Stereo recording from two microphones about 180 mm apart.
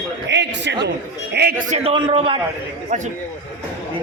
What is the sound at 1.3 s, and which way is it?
Speech, 65° right (ahead or behind).